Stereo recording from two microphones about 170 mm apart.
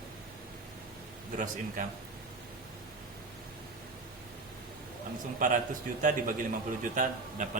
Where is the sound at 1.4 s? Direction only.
50° right (ahead or behind).